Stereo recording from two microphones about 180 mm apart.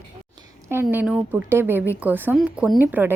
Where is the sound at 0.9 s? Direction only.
10° right (ahead or behind).